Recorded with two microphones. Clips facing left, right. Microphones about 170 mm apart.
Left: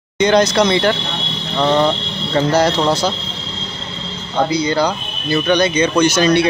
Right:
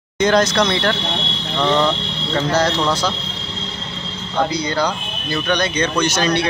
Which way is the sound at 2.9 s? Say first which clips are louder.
Left 3 dB; 25° left (ahead or behind).